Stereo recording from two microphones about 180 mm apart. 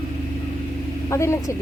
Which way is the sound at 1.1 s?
15° left (ahead or behind).